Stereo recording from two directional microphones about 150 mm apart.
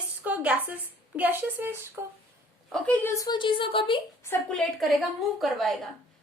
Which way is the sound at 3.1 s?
25° left (ahead or behind).